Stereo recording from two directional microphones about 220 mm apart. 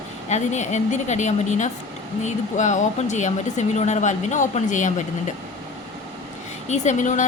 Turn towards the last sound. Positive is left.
turn(degrees=35)  # may be behind; listen again after turning